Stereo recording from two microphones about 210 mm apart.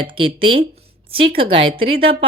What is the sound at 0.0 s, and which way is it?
Speech, 25° right (ahead or behind).